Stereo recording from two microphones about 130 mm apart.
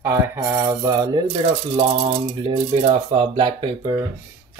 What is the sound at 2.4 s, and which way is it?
Speech, 45° right (ahead or behind).